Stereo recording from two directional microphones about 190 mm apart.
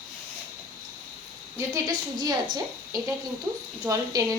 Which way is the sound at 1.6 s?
20° right (ahead or behind).